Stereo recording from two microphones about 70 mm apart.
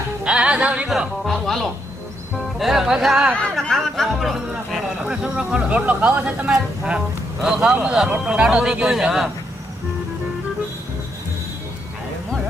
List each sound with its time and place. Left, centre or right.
0.3 s speech: centre
0.9 s speech: centre
2.6 s speech: centre
3.5 s speech: centre